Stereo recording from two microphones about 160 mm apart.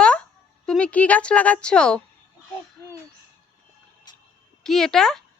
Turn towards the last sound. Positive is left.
turn(degrees=5)  # may be behind; listen again after turning